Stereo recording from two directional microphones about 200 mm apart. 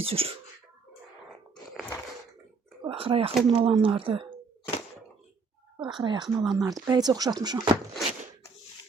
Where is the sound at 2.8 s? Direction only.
25° right (ahead or behind).